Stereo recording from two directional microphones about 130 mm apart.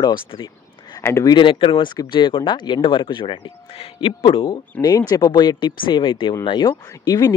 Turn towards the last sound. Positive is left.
turn(degrees=30)  # may be behind; listen again after turning